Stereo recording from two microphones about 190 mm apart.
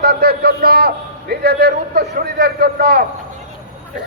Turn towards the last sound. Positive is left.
turn(degrees=-55)  # may be behind; listen again after turning